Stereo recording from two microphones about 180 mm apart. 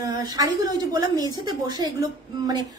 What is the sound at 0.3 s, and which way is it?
A woman's voice, 20° right (ahead or behind).